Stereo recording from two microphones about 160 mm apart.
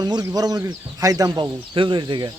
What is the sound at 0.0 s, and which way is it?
Speech, 25° right (ahead or behind).